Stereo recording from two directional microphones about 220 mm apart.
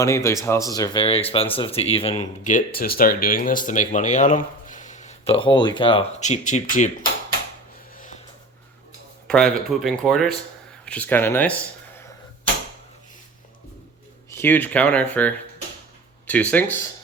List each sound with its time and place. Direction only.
0.0 s speech: 15° left (ahead or behind); by 6.9 s 35° left (ahead or behind)
7.9 s a sound: 35° left (ahead or behind)
9.2 s speech: 5° left (ahead or behind)
14.3 s speech: 10° left (ahead or behind)